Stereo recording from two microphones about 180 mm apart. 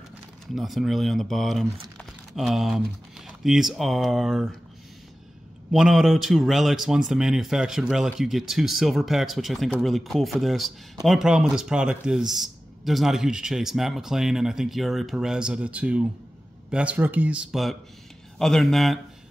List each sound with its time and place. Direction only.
0.6 s speech: centre (ahead or behind)
5.7 s speech: centre (ahead or behind)